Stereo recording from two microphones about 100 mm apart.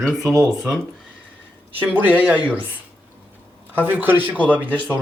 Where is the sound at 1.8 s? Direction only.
20° right (ahead or behind).